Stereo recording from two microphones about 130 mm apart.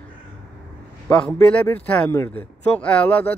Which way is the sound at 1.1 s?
10° left (ahead or behind).